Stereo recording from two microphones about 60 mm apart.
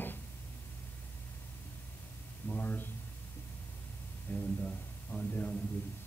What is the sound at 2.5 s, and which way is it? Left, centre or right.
Speech, left.